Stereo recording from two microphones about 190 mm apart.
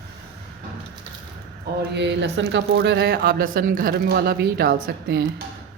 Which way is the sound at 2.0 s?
65° right (ahead or behind).